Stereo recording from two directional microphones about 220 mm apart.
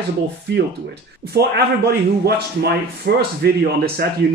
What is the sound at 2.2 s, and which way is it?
A man's voice, 45° right (ahead or behind).